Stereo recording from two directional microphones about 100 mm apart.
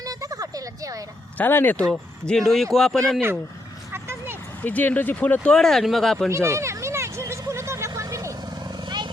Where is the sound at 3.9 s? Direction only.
25° right (ahead or behind).